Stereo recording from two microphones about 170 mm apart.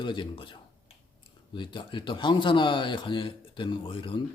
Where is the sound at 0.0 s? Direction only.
30° left (ahead or behind).